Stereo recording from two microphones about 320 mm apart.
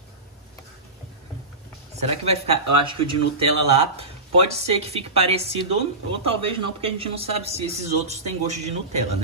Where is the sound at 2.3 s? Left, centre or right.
Centre.